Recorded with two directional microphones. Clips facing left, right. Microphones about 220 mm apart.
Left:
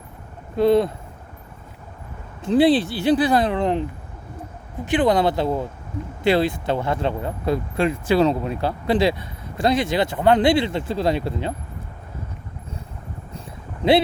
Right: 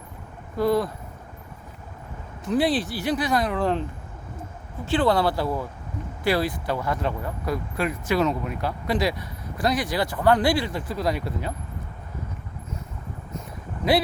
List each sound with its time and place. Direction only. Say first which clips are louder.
0.5 s speech: left 5 dB; 25° left (ahead or behind)
2.4 s speech: left 6 dB; 25° left (ahead or behind)
4.9 s speech: left 3 dB; 15° left (ahead or behind)
13.8 s speech: left 5 dB; 30° left (ahead or behind)